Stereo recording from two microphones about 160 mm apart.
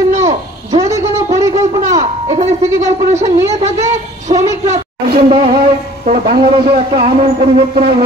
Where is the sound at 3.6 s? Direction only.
45° right (ahead or behind).